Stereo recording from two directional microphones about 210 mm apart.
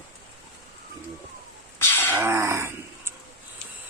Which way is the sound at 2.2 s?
10° right (ahead or behind).